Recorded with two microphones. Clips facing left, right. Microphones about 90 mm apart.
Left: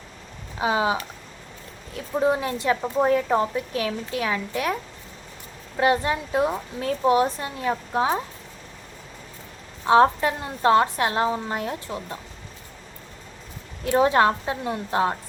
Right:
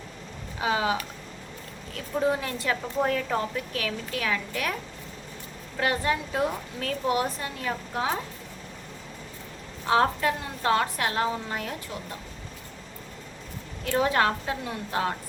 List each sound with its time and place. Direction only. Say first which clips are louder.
0.6 s a woman's voice: left 3 dB; 25° left (ahead or behind)
2.1 s a woman's voice: left 4 dB; 20° left (ahead or behind)
9.8 s a woman's voice: left 6 dB; 25° left (ahead or behind)
13.8 s a woman's voice: left 5 dB; 25° left (ahead or behind)